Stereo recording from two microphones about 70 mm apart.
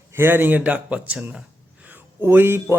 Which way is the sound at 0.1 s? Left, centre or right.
Right.